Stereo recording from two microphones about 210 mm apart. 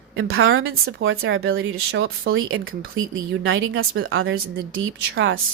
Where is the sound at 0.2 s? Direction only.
75° right (ahead or behind).